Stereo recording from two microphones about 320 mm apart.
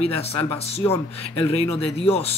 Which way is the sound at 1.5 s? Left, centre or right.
Centre.